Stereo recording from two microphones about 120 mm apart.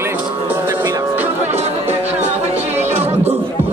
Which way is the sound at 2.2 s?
60° right (ahead or behind).